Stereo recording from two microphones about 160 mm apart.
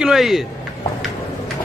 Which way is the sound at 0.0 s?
Centre (ahead or behind).